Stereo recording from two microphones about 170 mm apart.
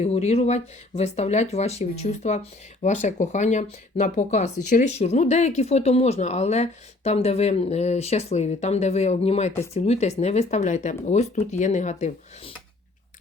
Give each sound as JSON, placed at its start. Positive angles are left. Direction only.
{"t": 0.0, "sound": "speech", "side_deg": 40}